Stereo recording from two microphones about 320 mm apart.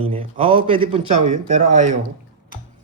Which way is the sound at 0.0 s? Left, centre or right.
Centre.